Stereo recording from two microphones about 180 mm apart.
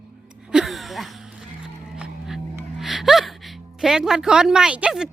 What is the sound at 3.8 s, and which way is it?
Speech, 5° right (ahead or behind).